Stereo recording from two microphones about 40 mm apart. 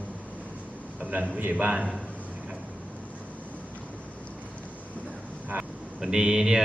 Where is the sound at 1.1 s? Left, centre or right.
Right.